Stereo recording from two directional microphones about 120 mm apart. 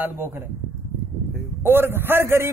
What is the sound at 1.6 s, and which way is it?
Speech, 20° right (ahead or behind).